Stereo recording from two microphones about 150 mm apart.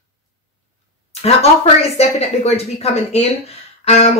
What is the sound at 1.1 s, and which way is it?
A man's voice, 45° left (ahead or behind).